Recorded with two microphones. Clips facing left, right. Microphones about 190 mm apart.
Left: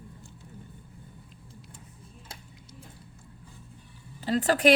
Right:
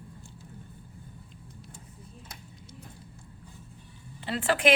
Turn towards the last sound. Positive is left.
turn(degrees=40)  # may be behind; listen again after turning